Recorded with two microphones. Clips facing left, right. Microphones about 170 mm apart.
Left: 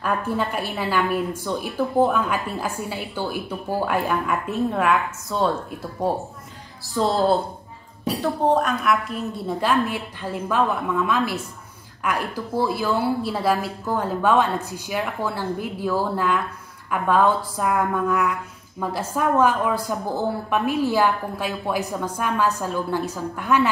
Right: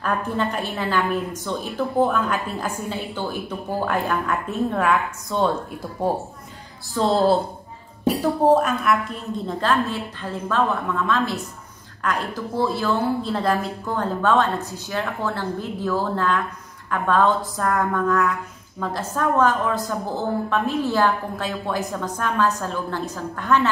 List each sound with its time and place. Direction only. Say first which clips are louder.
0.0 s a woman's voice: even; 10° left (ahead or behind)
6.9 s a woman's voice: right 1 dB; centre (ahead or behind)
9.5 s a woman's voice: left 1 dB; 10° left (ahead or behind)